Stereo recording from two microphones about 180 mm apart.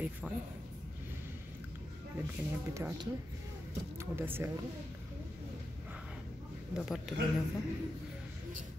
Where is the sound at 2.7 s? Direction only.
15° right (ahead or behind).